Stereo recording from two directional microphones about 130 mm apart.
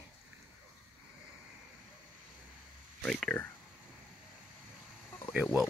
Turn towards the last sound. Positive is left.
turn(degrees=-10)  # may be behind; listen again after turning